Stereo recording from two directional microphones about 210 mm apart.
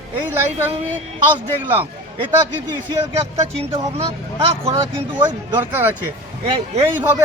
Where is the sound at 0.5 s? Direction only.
10° right (ahead or behind).